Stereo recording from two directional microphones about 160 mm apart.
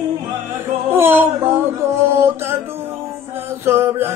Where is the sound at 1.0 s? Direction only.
15° right (ahead or behind).